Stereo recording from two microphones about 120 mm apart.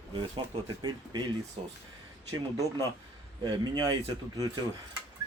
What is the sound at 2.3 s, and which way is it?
Speech, 30° right (ahead or behind).